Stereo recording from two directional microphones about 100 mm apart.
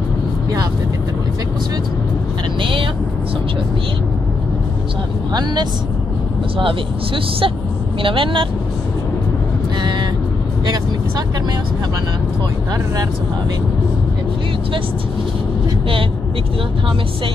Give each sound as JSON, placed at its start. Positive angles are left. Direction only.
{"t": 2.6, "sound": "vehicle", "side_deg": -60}
{"t": 5.3, "sound": "speech", "side_deg": -45}
{"t": 8.0, "sound": "speech", "side_deg": -60}
{"t": 9.8, "sound": "vehicle", "side_deg": -45}
{"t": 10.6, "sound": "speech", "side_deg": -40}